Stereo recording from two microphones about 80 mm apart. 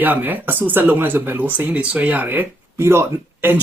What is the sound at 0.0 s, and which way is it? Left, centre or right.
Speech, right.